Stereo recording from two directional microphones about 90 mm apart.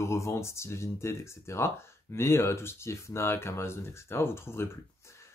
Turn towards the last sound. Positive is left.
turn(degrees=25)  # may be behind; listen again after turning